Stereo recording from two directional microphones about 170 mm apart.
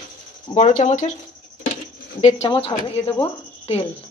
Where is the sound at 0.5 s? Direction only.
45° left (ahead or behind).